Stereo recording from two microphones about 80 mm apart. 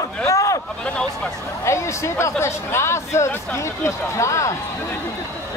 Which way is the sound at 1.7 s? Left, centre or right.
Left.